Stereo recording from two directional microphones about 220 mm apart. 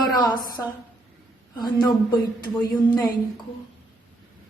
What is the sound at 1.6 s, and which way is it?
Speech, 20° left (ahead or behind).